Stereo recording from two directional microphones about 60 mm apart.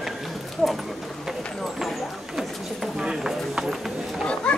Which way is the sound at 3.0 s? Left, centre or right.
Centre.